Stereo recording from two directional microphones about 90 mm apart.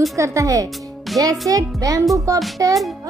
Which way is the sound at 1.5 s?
40° right (ahead or behind).